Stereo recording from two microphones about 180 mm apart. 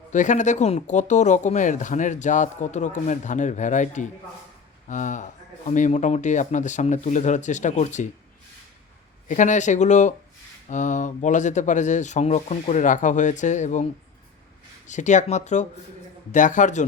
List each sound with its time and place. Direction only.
0.1 s speech: 45° left (ahead or behind)
9.3 s speech: 45° left (ahead or behind)
14.8 s speech: 40° left (ahead or behind)